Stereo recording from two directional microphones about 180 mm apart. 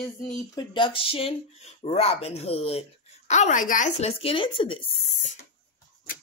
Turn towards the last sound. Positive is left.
turn(degrees=30)  # may be behind; listen again after turning